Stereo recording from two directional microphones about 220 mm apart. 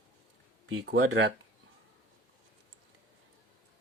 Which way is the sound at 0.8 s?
50° right (ahead or behind).